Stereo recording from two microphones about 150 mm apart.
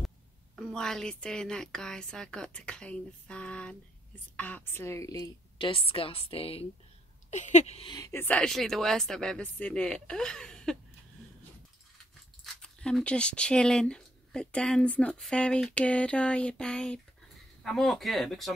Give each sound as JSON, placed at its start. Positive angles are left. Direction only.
{"t": 0.6, "sound": "a woman's voice", "side_deg": 5}
{"t": 7.2, "sound": "speech", "side_deg": 50}
{"t": 7.9, "sound": "a woman's voice", "side_deg": 20}
{"t": 12.6, "sound": "a woman's voice", "side_deg": 5}